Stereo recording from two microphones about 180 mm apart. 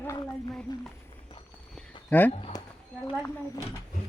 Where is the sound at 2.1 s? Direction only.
10° left (ahead or behind).